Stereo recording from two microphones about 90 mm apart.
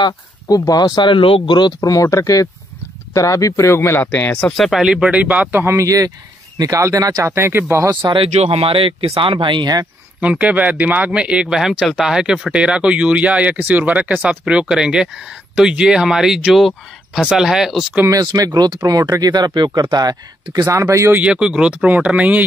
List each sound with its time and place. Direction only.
0.0 s speech: 45° left (ahead or behind); by 1.7 s 60° left (ahead or behind)
1.8 s speech: 40° left (ahead or behind)
4.0 s speech: 20° left (ahead or behind)
4.5 s speech: centre (ahead or behind); by 7.2 s 45° right (ahead or behind)
7.2 s speech: 30° right (ahead or behind)
8.1 s speech: 90° right; by 9.8 s 55° right (ahead or behind)
10.2 s speech: 15° right (ahead or behind)
18.1 s speech: 45° right (ahead or behind)
21.2 s speech: 10° right (ahead or behind)